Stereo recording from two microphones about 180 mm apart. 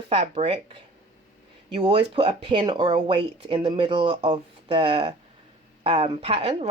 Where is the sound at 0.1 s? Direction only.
35° right (ahead or behind).